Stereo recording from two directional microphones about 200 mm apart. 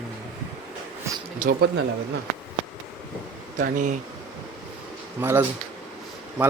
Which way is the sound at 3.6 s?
40° right (ahead or behind).